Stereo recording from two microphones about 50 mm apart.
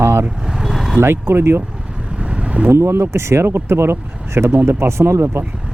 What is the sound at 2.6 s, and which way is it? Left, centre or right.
Speech, right.